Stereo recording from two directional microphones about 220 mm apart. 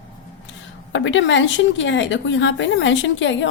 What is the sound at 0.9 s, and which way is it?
A woman's voice, 55° left (ahead or behind).